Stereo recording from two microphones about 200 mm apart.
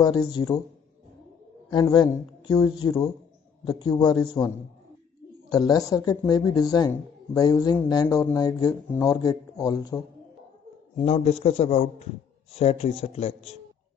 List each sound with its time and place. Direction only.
0.0 s a man's voice: 20° left (ahead or behind)
1.7 s a man's voice: 20° left (ahead or behind)
11.0 s a man's voice: 30° left (ahead or behind)